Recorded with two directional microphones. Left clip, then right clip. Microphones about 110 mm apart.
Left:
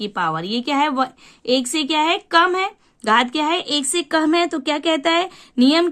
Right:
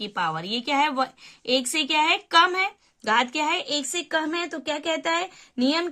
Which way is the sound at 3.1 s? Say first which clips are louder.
Left 5 dB; 40° left (ahead or behind).